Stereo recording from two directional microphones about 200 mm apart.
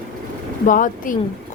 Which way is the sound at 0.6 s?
40° left (ahead or behind).